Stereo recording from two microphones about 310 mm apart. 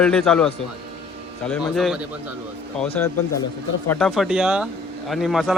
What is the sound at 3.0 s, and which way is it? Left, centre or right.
Speech, centre.